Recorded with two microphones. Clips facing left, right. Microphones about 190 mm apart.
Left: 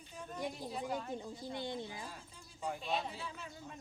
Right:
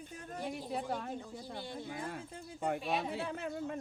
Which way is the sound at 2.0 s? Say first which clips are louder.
Right 7 dB; 60° right (ahead or behind).